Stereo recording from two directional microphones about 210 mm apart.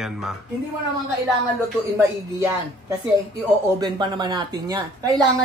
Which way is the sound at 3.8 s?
20° right (ahead or behind).